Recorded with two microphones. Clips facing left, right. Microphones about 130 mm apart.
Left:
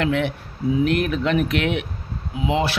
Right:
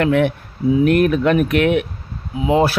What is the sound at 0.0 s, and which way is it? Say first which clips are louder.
Speech: right 6 dB; 50° right (ahead or behind).